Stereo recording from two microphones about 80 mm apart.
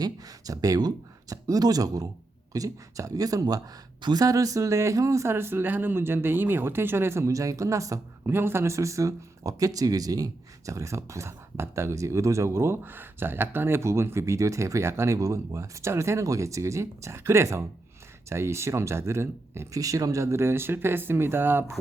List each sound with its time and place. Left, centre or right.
0.0 s speech: right
8.3 s speech: right